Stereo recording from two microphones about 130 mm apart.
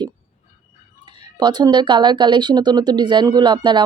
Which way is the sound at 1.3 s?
35° right (ahead or behind).